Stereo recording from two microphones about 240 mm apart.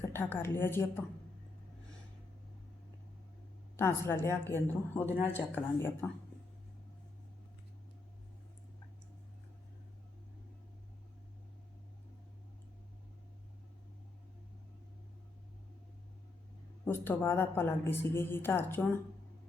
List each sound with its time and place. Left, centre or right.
0.0 s a woman's voice: centre
3.8 s a woman's voice: centre
16.8 s a woman's voice: centre